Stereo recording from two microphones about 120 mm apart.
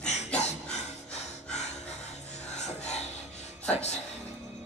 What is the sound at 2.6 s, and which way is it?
Music, 65° left (ahead or behind).